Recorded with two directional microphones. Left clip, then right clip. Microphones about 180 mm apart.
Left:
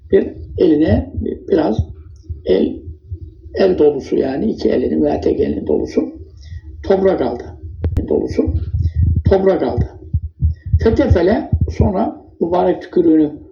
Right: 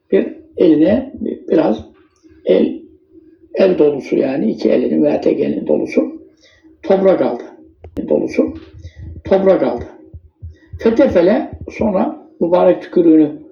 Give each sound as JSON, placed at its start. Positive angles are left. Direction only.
{"t": 0.1, "sound": "speech", "side_deg": -30}
{"t": 3.5, "sound": "speech", "side_deg": -30}